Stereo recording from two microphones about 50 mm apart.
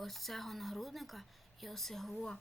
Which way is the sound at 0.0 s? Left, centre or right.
Centre.